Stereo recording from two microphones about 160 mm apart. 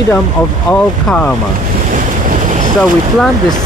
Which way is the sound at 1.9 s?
50° right (ahead or behind).